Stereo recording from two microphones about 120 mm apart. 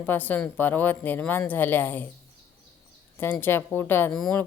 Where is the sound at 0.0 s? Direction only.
15° left (ahead or behind).